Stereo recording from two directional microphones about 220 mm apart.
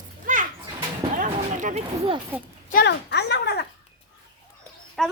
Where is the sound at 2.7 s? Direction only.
45° left (ahead or behind).